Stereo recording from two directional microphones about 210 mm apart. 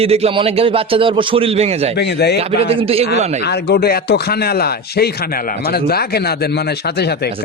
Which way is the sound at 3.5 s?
50° left (ahead or behind).